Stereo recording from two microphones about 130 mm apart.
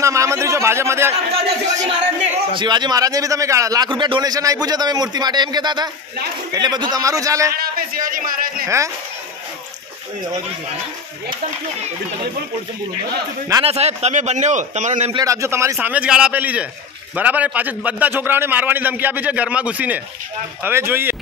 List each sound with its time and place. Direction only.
0.0 s a sound: 25° right (ahead or behind)
1.3 s a man's voice: 65° right (ahead or behind)
2.5 s a man's voice: 35° right (ahead or behind)
3.9 s a man's voice: 40° right (ahead or behind)
8.0 s speech: 90° right
8.6 s a man's voice: 25° right (ahead or behind)
13.7 s a man's voice: 55° right (ahead or behind)
15.1 s a man's voice: 25° right (ahead or behind)